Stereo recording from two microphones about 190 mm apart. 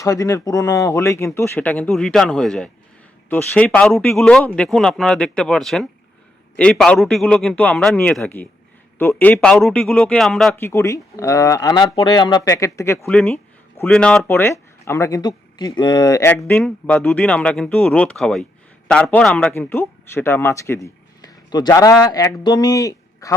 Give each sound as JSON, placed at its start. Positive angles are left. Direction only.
{"t": 0.0, "sound": "speech", "side_deg": 15}
{"t": 10.5, "sound": "speech", "side_deg": 15}
{"t": 16.3, "sound": "a man's voice", "side_deg": 10}